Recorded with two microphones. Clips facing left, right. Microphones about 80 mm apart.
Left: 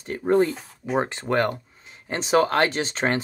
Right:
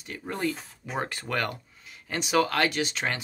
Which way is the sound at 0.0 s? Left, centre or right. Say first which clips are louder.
Left 11 dB; left.